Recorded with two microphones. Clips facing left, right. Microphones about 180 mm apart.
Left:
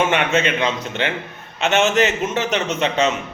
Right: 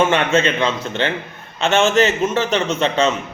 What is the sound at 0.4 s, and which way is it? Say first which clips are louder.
A man's voice: right 2 dB; 15° left (ahead or behind).